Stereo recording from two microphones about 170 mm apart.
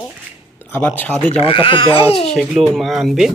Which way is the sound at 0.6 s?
15° left (ahead or behind).